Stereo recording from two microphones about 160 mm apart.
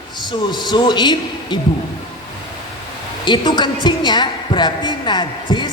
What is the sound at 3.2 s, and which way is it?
A man's voice, 30° left (ahead or behind).